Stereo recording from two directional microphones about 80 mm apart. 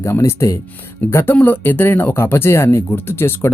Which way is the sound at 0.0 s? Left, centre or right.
Left.